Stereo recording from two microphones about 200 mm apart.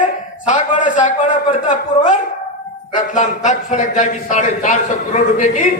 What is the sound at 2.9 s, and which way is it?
A man's voice, 40° left (ahead or behind).